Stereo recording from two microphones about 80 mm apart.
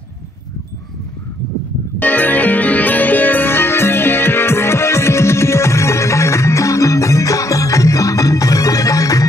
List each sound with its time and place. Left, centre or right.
2.0 s music: left